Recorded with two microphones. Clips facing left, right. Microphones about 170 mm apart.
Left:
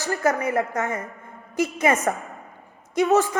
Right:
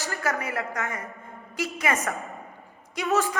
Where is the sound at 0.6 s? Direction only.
20° left (ahead or behind).